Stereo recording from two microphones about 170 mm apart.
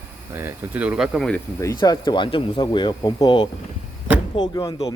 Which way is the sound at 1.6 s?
25° left (ahead or behind).